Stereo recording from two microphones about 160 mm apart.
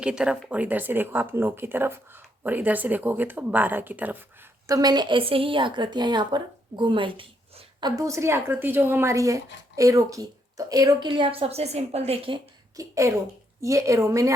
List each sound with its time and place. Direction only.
0.0 s speech: 5° right (ahead or behind)
4.6 s a woman's voice: 25° right (ahead or behind)
12.7 s a woman's voice: 20° right (ahead or behind)